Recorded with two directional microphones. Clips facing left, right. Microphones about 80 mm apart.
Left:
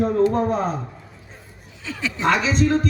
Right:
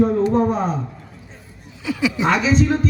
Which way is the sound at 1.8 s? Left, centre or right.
Centre.